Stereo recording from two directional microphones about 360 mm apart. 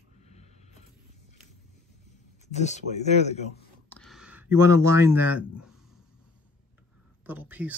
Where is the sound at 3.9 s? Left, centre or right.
Centre.